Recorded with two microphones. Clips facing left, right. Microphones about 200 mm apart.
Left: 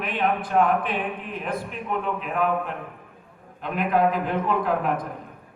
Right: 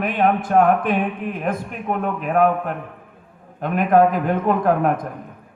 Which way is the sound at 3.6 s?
50° right (ahead or behind).